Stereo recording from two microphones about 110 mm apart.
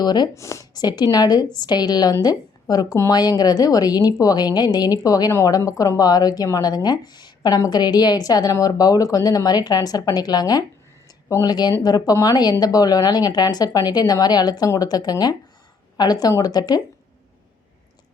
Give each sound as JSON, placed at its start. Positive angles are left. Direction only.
{"t": 0.0, "sound": "speech", "side_deg": 40}
{"t": 0.3, "sound": "speech", "side_deg": 25}